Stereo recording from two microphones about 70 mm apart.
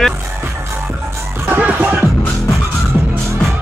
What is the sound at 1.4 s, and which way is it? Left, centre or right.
Music, right.